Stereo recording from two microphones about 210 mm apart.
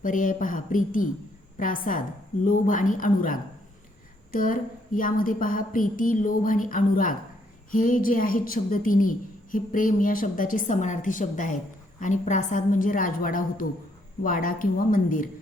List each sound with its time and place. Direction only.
0.0 s a woman's voice: 40° left (ahead or behind)